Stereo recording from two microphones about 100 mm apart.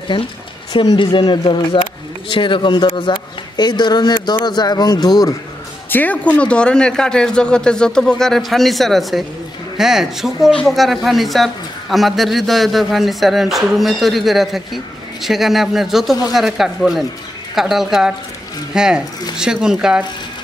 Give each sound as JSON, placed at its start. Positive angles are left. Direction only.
{"t": 1.0, "sound": "speech", "side_deg": 50}
{"t": 5.9, "sound": "a man's voice", "side_deg": 15}